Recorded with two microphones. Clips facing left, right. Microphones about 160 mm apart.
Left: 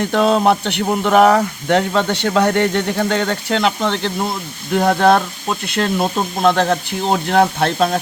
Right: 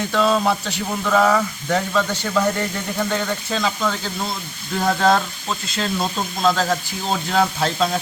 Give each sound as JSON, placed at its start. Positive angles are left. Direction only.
{"t": 0.0, "sound": "a man's voice", "side_deg": 55}